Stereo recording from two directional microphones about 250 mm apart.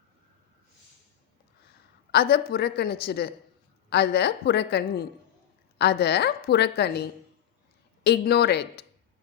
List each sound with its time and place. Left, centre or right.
2.1 s a woman's voice: left